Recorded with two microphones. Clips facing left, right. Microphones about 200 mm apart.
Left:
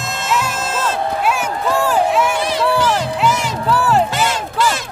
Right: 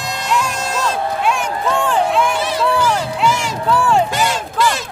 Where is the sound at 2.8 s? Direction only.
5° left (ahead or behind).